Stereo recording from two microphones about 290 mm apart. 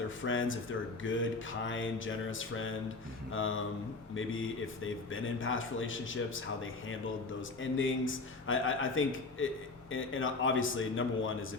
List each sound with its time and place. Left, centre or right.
0.2 s speech: left
1.0 s mantra: left
3.3 s speech: left